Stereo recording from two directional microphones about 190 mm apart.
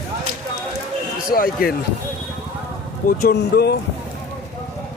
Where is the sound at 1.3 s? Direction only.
50° left (ahead or behind).